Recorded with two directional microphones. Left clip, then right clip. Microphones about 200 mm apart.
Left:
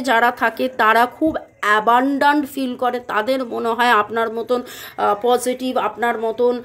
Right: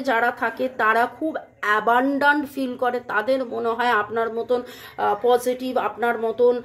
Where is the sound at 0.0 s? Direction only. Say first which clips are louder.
Left 5 dB; 35° left (ahead or behind).